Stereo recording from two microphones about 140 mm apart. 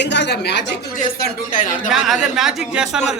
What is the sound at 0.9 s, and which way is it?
Speech, 75° left (ahead or behind).